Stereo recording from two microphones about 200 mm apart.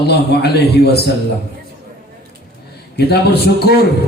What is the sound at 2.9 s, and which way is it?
Speech, 55° left (ahead or behind).